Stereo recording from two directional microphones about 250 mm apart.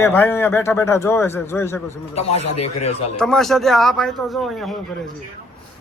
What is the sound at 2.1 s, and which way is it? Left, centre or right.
Speech, left.